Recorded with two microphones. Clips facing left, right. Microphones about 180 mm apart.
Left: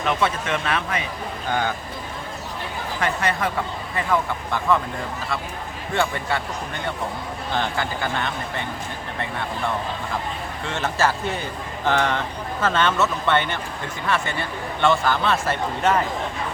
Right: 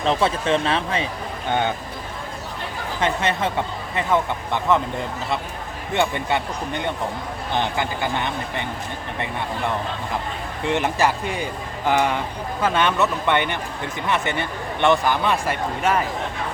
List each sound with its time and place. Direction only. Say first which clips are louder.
0.0 s speech: right 3 dB; 30° right (ahead or behind)
3.0 s speech: right 2 dB; 25° right (ahead or behind)
5.9 s speech: right 2 dB; 20° right (ahead or behind)
10.6 s speech: right 3 dB; 15° right (ahead or behind)